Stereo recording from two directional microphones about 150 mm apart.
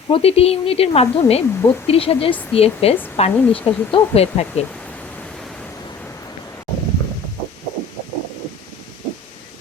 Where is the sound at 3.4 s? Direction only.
10° left (ahead or behind).